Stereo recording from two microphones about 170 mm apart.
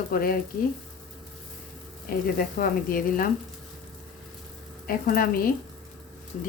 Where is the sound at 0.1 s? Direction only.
60° left (ahead or behind).